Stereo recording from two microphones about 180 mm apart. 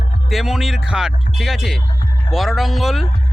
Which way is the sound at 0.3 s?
Centre (ahead or behind).